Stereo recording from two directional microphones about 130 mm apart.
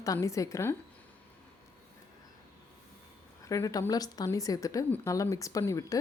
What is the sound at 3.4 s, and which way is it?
Speech, 25° left (ahead or behind).